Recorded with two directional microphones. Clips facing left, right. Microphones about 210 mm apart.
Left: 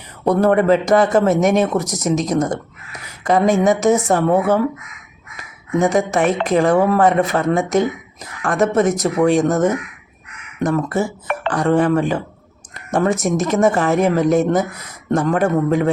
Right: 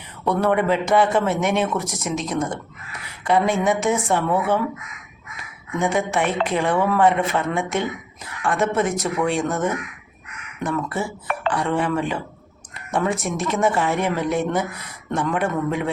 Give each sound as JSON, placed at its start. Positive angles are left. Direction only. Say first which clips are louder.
{"t": 0.3, "sound": "a man's voice", "louder": "left 6 dB", "side_deg": 40}
{"t": 5.7, "sound": "a man's voice", "louder": "left 5 dB", "side_deg": 40}